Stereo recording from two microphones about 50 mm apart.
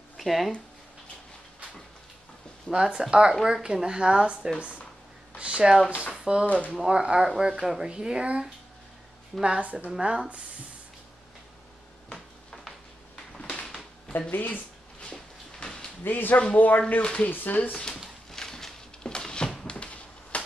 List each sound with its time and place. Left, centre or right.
0.2 s speech: centre
2.7 s speech: centre
5.4 s a sound: centre
6.4 s speech: left
6.9 s a woman's voice: centre
13.4 s a sound: centre
14.3 s speech: left
15.6 s a sound: centre
16.0 s speech: left
17.0 s speech: centre
17.3 s speech: left
17.7 s a sound: centre